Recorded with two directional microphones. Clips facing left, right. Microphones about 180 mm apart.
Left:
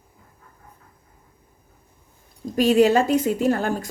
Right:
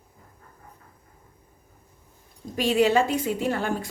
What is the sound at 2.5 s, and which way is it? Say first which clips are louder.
A woman's voice: left 4 dB; 40° left (ahead or behind).